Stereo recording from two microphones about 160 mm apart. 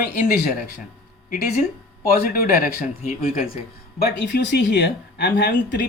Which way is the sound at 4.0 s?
90° left.